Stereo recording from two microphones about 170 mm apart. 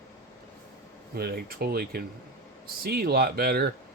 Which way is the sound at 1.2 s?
70° right (ahead or behind).